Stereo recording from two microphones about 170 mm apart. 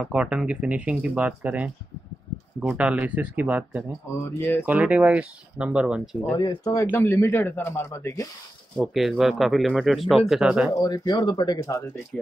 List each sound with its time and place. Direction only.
0.0 s speech: 5° right (ahead or behind)
4.2 s speech: 15° left (ahead or behind)
4.6 s speech: 10° right (ahead or behind)
6.3 s speech: 25° left (ahead or behind)
8.7 s speech: centre (ahead or behind)
10.7 s speech: 25° left (ahead or behind)